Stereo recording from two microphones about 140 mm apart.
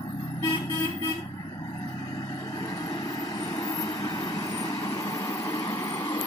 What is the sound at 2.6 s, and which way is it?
Vehicle, 25° left (ahead or behind).